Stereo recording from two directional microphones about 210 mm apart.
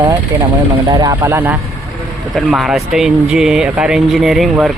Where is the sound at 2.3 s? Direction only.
Centre (ahead or behind).